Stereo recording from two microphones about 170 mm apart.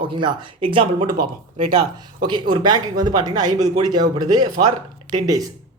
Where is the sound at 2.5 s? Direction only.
25° right (ahead or behind).